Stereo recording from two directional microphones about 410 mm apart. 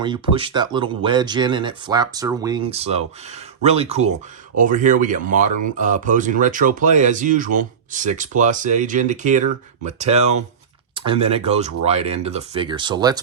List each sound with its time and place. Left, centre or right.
0.0 s speech: centre